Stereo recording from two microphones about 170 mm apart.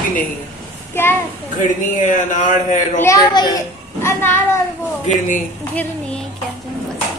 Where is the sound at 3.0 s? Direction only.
20° left (ahead or behind).